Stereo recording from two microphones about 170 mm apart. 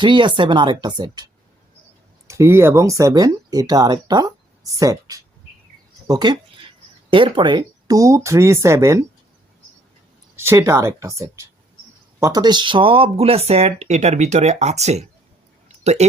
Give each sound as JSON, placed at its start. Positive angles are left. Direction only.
{"t": 0.0, "sound": "speech", "side_deg": -30}
{"t": 10.3, "sound": "speech", "side_deg": -15}
{"t": 12.2, "sound": "speech", "side_deg": -25}